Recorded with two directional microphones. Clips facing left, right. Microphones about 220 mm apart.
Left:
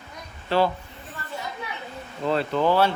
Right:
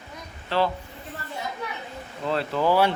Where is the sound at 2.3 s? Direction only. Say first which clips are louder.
Left 1 dB; 5° right (ahead or behind).